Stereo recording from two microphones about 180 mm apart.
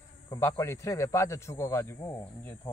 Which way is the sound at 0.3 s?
15° left (ahead or behind).